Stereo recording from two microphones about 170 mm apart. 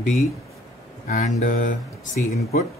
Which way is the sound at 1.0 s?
50° left (ahead or behind).